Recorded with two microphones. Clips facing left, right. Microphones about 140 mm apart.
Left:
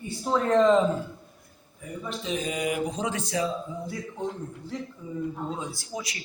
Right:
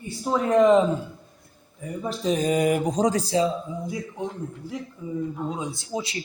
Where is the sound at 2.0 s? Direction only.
40° right (ahead or behind).